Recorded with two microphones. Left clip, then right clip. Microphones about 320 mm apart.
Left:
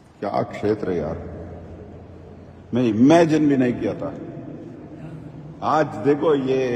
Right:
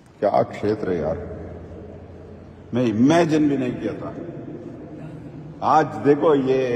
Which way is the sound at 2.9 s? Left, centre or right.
Centre.